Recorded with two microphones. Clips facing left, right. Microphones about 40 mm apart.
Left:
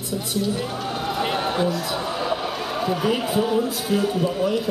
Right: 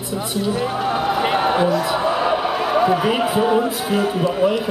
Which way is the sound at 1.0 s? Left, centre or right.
Centre.